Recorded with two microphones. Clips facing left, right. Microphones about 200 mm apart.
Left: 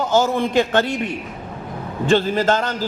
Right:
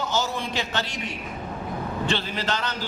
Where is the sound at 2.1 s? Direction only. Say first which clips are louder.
Left 13 dB; 45° left (ahead or behind).